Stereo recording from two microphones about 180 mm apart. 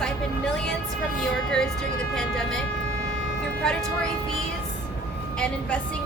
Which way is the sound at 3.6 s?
5° left (ahead or behind).